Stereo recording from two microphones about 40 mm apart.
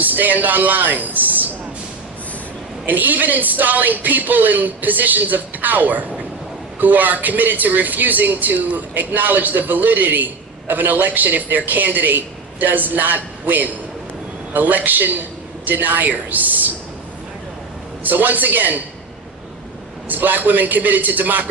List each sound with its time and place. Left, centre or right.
0.0 s speech: right
2.8 s a man's voice: right
18.0 s a man's voice: right
20.1 s a man's voice: right